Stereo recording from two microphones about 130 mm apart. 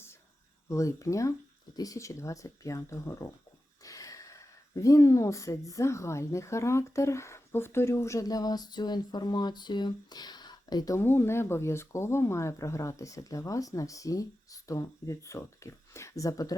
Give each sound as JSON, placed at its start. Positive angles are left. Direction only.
{"t": 0.7, "sound": "speech", "side_deg": 25}
{"t": 11.0, "sound": "speech", "side_deg": 15}